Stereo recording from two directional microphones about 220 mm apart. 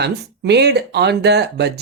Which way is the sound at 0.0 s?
50° right (ahead or behind).